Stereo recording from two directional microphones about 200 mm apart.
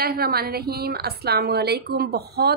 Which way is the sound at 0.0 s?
50° right (ahead or behind).